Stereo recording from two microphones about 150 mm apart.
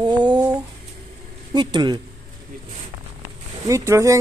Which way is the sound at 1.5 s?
30° right (ahead or behind).